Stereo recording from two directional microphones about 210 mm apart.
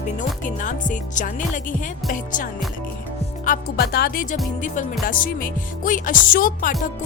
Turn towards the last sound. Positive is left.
turn(degrees=40)  # may be behind; listen again after turning